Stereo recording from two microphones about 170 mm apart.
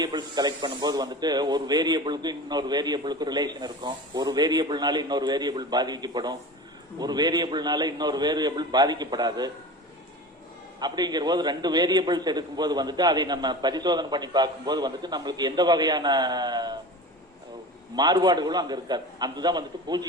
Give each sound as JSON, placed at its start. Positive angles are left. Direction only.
{"t": 0.0, "sound": "speech", "side_deg": -25}
{"t": 10.8, "sound": "speech", "side_deg": -25}
{"t": 17.9, "sound": "speech", "side_deg": -25}